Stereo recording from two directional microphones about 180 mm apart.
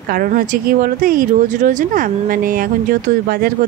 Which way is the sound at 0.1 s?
50° right (ahead or behind).